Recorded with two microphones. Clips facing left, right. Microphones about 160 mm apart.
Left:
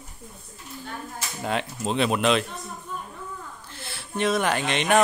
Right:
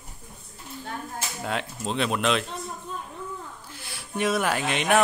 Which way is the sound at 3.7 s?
10° right (ahead or behind).